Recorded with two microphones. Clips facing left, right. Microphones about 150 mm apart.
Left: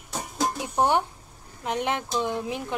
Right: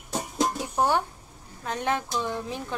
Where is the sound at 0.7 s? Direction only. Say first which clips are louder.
Left 2 dB; 20° left (ahead or behind).